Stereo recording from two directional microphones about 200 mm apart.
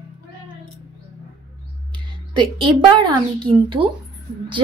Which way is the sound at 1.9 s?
25° right (ahead or behind).